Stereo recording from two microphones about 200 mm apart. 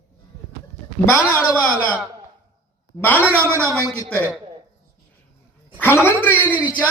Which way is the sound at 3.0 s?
10° left (ahead or behind).